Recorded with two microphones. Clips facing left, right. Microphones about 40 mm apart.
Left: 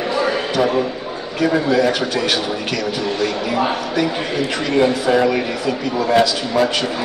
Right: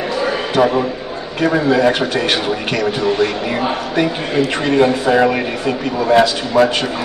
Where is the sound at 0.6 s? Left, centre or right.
Right.